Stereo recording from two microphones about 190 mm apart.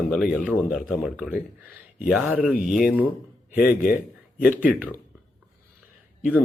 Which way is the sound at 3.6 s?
50° left (ahead or behind).